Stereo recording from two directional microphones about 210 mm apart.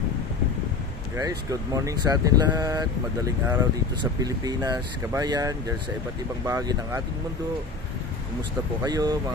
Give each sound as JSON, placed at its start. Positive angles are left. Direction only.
{"t": 1.1, "sound": "speech", "side_deg": -15}
{"t": 8.8, "sound": "speech", "side_deg": -20}